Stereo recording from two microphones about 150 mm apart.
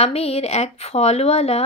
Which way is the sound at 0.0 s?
45° left (ahead or behind).